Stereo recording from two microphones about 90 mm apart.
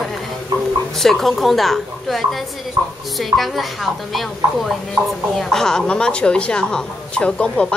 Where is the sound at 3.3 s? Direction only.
Centre (ahead or behind).